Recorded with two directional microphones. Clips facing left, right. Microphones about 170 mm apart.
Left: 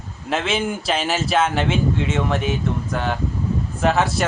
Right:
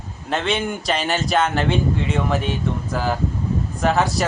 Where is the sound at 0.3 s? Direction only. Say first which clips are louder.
Even; centre (ahead or behind).